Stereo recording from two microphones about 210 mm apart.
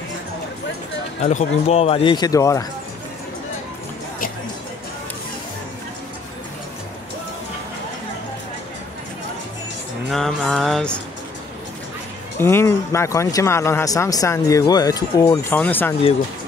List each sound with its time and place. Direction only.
1.2 s speech: 30° left (ahead or behind); by 2.6 s 15° left (ahead or behind)
10.1 s mantra: centre (ahead or behind)
12.4 s speech: 10° left (ahead or behind)